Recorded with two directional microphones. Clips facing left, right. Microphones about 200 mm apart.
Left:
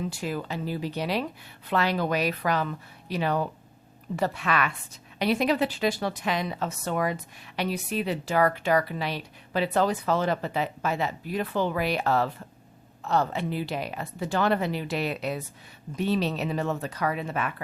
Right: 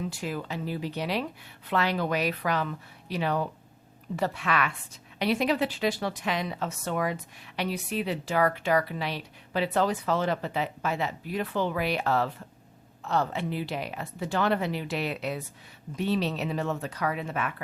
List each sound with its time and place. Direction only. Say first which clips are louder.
0.1 s a woman's voice: left 2 dB; 35° left (ahead or behind)